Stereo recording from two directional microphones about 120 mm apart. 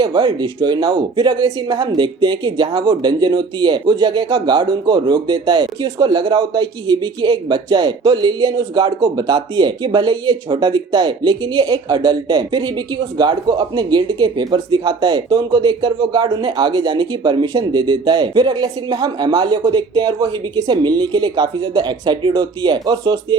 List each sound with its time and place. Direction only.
0.0 s speech: 40° right (ahead or behind)